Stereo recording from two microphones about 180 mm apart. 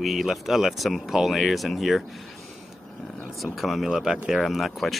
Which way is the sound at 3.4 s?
Centre (ahead or behind).